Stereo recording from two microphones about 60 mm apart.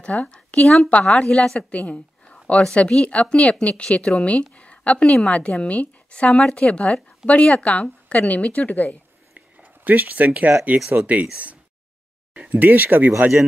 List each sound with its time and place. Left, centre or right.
0.3 s a woman's voice: centre
1.7 s a woman's voice: left
9.3 s a sound: right
10.9 s speech: right
12.4 s speech: right